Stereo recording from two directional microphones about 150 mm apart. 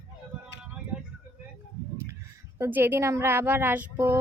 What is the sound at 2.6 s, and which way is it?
Speech, 15° right (ahead or behind).